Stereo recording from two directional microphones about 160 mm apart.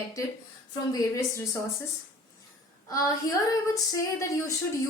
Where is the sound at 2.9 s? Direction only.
20° left (ahead or behind).